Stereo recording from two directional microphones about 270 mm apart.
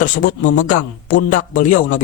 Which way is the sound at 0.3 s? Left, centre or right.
Left.